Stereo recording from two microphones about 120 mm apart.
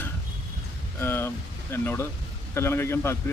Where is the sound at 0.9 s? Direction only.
20° left (ahead or behind).